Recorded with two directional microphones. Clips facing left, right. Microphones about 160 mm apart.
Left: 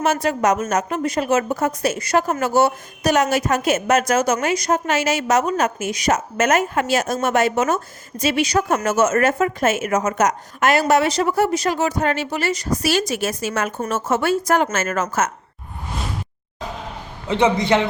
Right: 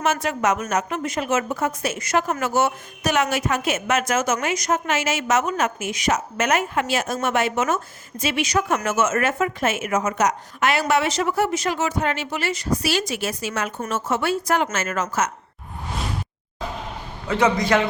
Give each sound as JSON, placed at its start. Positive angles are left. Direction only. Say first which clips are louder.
{"t": 0.0, "sound": "a woman's voice", "louder": "left 3 dB", "side_deg": 35}
{"t": 17.2, "sound": "a man's voice", "louder": "left 2 dB", "side_deg": 25}